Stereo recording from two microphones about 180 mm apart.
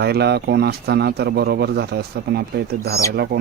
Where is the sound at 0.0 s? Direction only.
65° right (ahead or behind).